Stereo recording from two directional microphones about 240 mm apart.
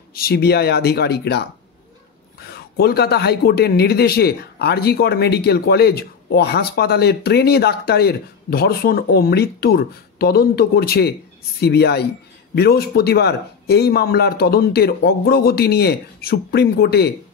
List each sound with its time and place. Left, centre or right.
0.1 s speech: left
2.8 s speech: left